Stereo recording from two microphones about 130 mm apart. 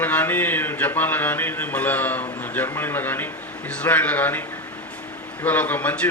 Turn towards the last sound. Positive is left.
turn(degrees=10)  # may be behind; listen again after turning